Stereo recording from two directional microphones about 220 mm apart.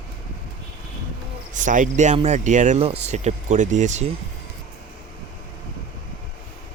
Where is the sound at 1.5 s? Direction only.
35° right (ahead or behind).